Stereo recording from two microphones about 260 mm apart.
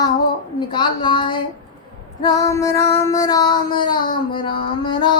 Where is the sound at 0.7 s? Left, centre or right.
Centre.